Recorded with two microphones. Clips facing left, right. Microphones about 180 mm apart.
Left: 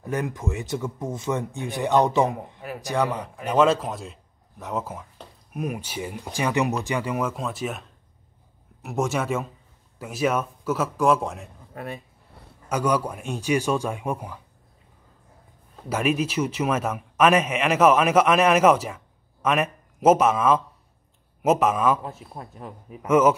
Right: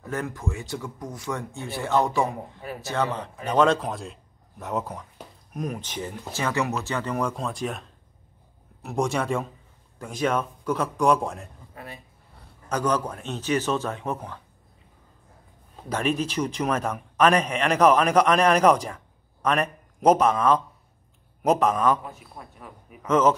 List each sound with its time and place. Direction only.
0.0 s a man's voice: 15° left (ahead or behind)
8.8 s a man's voice: 5° left (ahead or behind)
11.7 s speech: 55° left (ahead or behind)
12.6 s a man's voice: 10° left (ahead or behind)
15.9 s a man's voice: 10° left (ahead or behind)
22.0 s speech: 30° left (ahead or behind)
23.0 s a man's voice: 10° left (ahead or behind)